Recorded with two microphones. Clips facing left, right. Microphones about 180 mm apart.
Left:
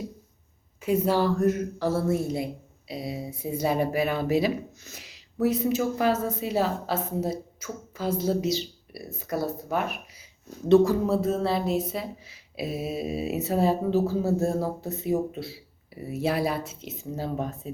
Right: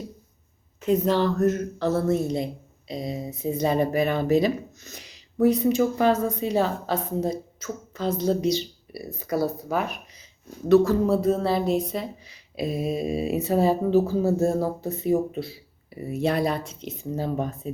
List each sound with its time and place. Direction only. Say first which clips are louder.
0.8 s speech: right 2 dB; 10° left (ahead or behind)